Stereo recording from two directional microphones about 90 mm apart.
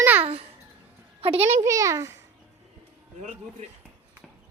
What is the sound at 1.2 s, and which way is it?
Speech, 80° right.